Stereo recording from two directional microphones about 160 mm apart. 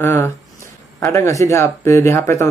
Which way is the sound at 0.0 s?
15° left (ahead or behind).